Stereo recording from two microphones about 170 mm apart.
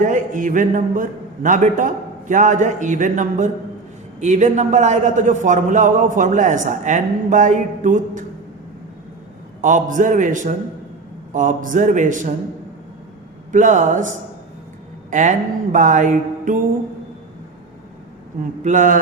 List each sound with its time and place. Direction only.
0.0 s a man's voice: 50° right (ahead or behind)
9.6 s a man's voice: 50° right (ahead or behind)
13.5 s a man's voice: 45° right (ahead or behind)
18.6 s a man's voice: 45° right (ahead or behind)